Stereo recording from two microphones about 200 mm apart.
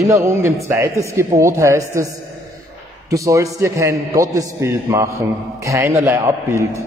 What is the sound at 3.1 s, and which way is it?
Speech, 15° right (ahead or behind).